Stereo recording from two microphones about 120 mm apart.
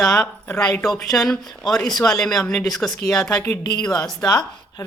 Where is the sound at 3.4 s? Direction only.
20° left (ahead or behind).